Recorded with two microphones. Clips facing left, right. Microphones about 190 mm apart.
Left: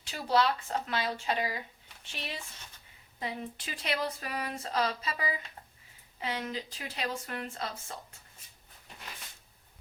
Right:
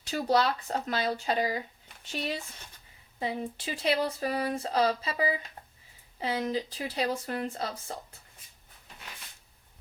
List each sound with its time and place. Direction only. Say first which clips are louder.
0.0 s speech: right 2 dB; 40° right (ahead or behind)